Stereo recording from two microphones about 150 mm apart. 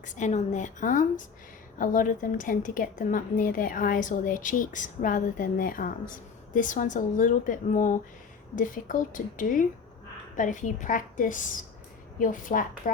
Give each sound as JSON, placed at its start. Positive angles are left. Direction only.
{"t": 0.2, "sound": "a woman's voice", "side_deg": 55}